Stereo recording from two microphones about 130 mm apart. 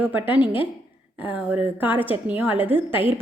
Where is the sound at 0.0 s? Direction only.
15° right (ahead or behind).